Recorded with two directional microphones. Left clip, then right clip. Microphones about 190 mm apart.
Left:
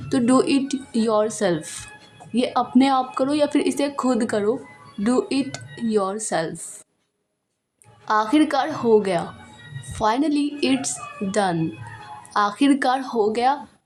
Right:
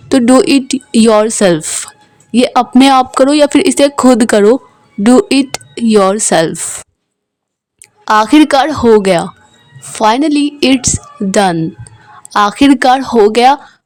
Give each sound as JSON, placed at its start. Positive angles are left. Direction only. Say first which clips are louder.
{"t": 0.1, "sound": "a woman's voice", "louder": "right 11 dB", "side_deg": -40}
{"t": 8.0, "sound": "a woman's voice", "louder": "right 12 dB", "side_deg": -45}